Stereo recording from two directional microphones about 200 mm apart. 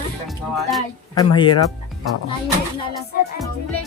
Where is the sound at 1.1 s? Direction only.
20° left (ahead or behind).